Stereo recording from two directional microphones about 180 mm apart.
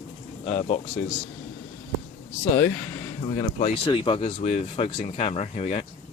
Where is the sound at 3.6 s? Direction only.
40° left (ahead or behind).